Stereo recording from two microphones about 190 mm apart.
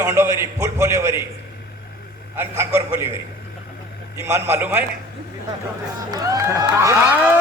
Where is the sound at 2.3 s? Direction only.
15° right (ahead or behind).